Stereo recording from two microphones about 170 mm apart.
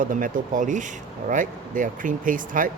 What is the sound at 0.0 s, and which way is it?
Speech, 50° right (ahead or behind).